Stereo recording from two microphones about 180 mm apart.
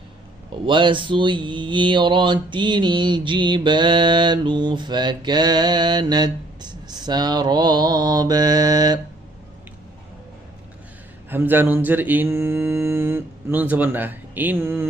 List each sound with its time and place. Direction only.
0.6 s mantra: 25° right (ahead or behind)
11.3 s mantra: 10° right (ahead or behind)